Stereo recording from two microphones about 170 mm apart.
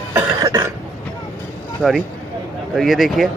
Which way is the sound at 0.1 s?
20° right (ahead or behind).